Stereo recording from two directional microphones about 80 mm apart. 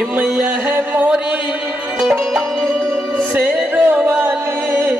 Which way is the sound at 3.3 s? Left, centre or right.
Right.